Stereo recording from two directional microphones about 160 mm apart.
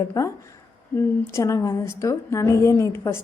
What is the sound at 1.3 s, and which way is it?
A woman's voice, 20° left (ahead or behind).